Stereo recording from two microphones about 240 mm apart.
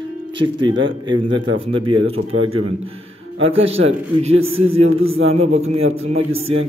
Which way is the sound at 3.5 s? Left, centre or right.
Right.